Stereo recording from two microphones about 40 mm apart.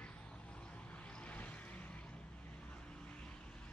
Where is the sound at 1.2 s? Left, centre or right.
Left.